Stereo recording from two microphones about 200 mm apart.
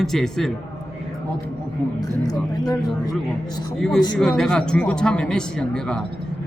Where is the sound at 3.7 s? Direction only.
5° left (ahead or behind).